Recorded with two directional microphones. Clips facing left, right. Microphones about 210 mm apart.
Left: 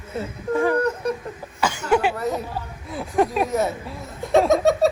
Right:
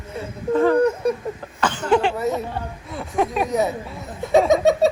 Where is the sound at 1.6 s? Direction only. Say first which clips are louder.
Right 1 dB; 10° left (ahead or behind).